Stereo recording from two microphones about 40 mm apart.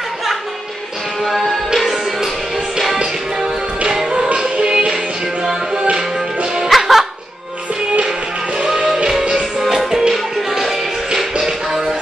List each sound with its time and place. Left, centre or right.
4.0 s music: centre
6.7 s music: centre
8.7 s music: right
9.6 s music: centre
11.4 s music: centre